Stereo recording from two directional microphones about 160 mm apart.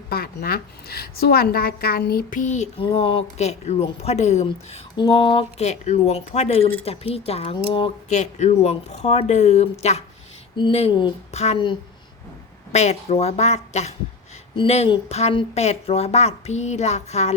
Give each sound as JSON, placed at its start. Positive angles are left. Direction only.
{"t": 0.1, "sound": "a woman's voice", "side_deg": 75}
{"t": 2.4, "sound": "a woman's voice", "side_deg": 50}
{"t": 2.7, "sound": "speech", "side_deg": 35}
{"t": 4.4, "sound": "speech", "side_deg": 35}
{"t": 5.6, "sound": "speech", "side_deg": 45}
{"t": 8.1, "sound": "a woman's voice", "side_deg": 45}
{"t": 12.7, "sound": "a woman's voice", "side_deg": 40}